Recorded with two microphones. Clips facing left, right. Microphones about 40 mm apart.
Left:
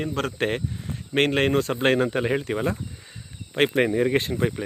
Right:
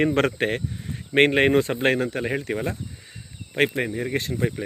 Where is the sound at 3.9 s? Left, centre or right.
Left.